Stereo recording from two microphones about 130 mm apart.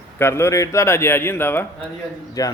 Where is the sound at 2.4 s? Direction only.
25° left (ahead or behind).